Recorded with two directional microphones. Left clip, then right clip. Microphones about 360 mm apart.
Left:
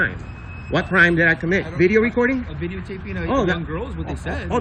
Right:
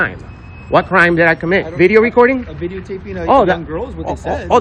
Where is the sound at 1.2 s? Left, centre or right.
Centre.